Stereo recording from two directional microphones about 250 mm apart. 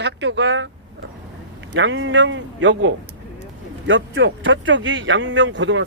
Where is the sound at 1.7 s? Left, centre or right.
Right.